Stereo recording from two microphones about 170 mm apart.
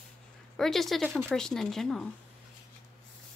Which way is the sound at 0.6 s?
Centre (ahead or behind).